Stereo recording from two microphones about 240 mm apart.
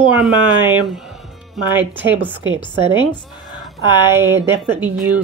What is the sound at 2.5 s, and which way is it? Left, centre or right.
Speech, centre.